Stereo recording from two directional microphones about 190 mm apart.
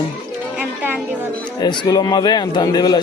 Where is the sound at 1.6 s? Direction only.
20° left (ahead or behind).